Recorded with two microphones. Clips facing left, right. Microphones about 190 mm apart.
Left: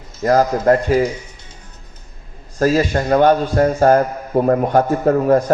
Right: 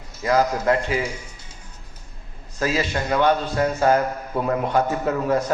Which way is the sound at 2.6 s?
45° left (ahead or behind).